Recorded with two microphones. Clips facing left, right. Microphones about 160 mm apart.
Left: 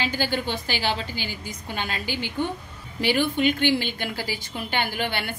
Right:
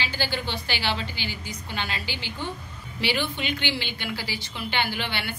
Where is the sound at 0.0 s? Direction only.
50° left (ahead or behind).